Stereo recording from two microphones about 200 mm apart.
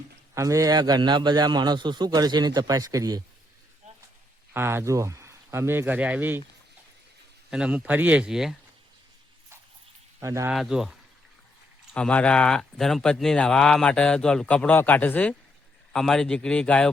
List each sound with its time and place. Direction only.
0.3 s a man's voice: 15° right (ahead or behind)
4.5 s speech: 10° right (ahead or behind)
7.5 s speech: 5° right (ahead or behind)
10.2 s speech: 15° right (ahead or behind)
10.5 s speech: centre (ahead or behind)
11.9 s speech: 5° left (ahead or behind)